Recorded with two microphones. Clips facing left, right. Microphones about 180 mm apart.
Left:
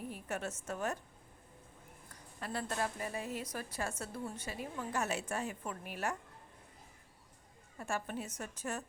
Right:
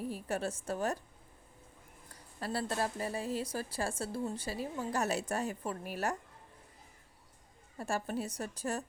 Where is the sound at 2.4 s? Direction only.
35° right (ahead or behind).